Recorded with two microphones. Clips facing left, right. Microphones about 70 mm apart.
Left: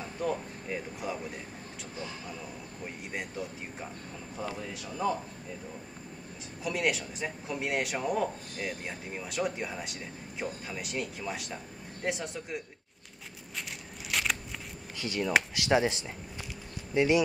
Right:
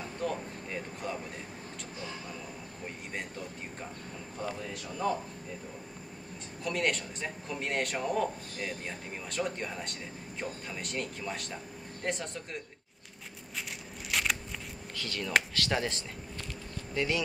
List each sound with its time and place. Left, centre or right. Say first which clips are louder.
0.2 s speech: left 2 dB; centre
2.8 s speech: left 2 dB; centre
6.6 s speech: left 1 dB; centre
14.1 s a sound: even; centre
15.0 s speech: left 2 dB; centre